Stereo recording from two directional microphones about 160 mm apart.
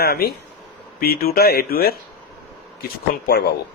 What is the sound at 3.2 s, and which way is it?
Speech, 90° left.